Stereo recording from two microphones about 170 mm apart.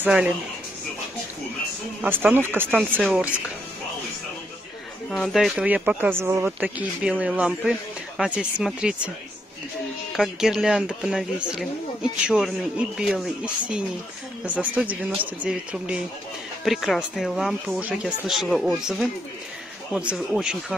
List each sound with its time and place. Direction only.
0.0 s speech: 5° right (ahead or behind)
2.0 s speech: 10° right (ahead or behind)
5.1 s speech: centre (ahead or behind)
10.1 s speech: centre (ahead or behind)
14.4 s speech: 10° right (ahead or behind)